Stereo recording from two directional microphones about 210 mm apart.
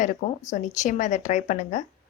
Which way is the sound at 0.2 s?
35° left (ahead or behind).